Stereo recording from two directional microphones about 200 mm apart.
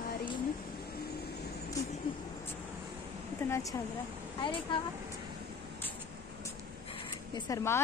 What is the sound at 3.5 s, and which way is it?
Speech, 15° left (ahead or behind).